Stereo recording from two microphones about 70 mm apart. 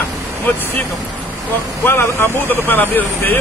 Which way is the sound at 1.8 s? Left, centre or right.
Left.